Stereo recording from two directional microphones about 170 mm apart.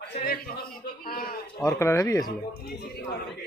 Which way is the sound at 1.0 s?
60° left (ahead or behind).